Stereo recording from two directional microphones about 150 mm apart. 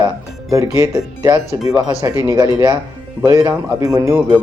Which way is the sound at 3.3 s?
20° right (ahead or behind).